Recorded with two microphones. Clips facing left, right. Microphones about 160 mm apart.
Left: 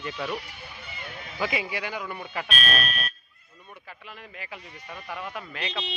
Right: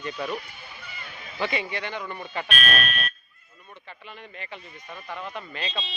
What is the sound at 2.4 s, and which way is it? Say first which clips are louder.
Speech: right 2 dB; 35° left (ahead or behind).